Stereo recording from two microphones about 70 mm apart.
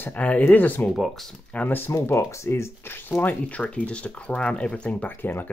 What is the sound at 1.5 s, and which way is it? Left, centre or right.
Speech, left.